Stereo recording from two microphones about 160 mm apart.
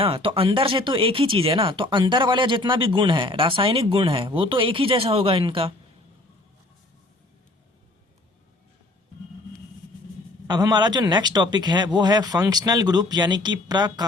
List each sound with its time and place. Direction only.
0.0 s speech: 35° right (ahead or behind)
10.4 s speech: 25° right (ahead or behind)